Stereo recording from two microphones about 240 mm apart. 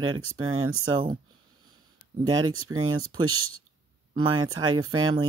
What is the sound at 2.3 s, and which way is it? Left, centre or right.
Speech, right.